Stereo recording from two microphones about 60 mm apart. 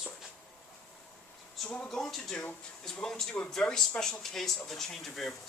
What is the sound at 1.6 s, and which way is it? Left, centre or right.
Speech, centre.